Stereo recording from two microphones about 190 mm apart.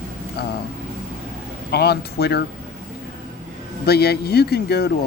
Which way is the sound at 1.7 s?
60° left (ahead or behind).